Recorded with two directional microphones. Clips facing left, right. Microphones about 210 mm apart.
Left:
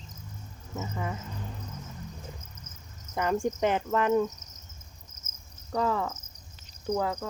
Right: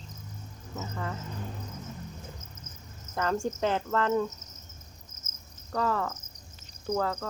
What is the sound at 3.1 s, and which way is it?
Speech, 15° left (ahead or behind).